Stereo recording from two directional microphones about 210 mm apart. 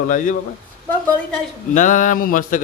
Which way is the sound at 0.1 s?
40° left (ahead or behind).